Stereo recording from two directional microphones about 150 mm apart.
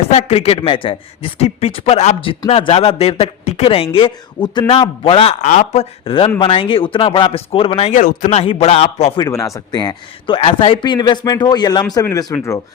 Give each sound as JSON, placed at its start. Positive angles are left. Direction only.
{"t": 0.1, "sound": "a man's voice", "side_deg": 40}
{"t": 7.9, "sound": "speech", "side_deg": 60}
{"t": 8.3, "sound": "speech", "side_deg": 45}
{"t": 9.1, "sound": "a man's voice", "side_deg": 20}